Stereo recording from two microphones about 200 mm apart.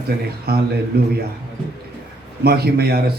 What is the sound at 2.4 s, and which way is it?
Speech, 50° right (ahead or behind).